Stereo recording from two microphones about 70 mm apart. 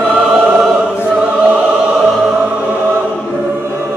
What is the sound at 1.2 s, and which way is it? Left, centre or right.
Opera, centre.